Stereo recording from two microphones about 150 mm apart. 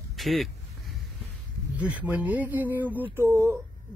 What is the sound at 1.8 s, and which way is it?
Speech, 10° right (ahead or behind).